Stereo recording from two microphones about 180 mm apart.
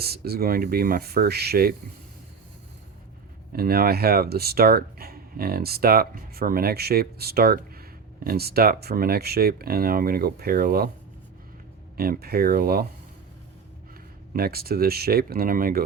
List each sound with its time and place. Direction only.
0.0 s speech: 60° right (ahead or behind)
3.5 s speech: 55° right (ahead or behind)
11.9 s speech: 55° right (ahead or behind)
14.3 s speech: 55° right (ahead or behind)